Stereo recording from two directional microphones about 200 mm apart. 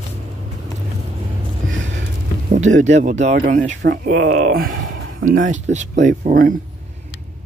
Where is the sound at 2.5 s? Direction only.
35° right (ahead or behind).